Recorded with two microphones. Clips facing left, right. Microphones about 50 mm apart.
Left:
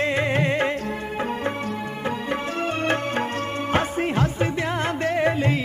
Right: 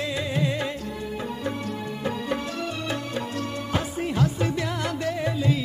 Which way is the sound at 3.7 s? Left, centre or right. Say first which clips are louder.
Left 6 dB; left.